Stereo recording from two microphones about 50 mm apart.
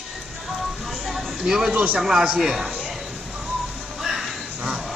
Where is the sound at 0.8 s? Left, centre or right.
Centre.